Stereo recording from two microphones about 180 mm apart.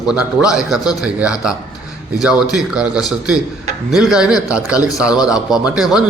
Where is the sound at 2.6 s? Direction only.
5° right (ahead or behind).